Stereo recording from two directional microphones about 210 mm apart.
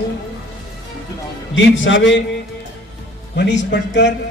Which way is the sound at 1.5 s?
60° left (ahead or behind).